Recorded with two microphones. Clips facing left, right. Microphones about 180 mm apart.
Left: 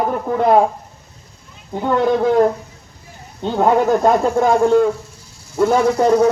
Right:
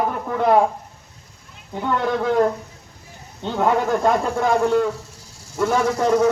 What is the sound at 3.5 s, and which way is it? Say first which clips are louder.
A man's voice: left 5 dB; 40° left (ahead or behind).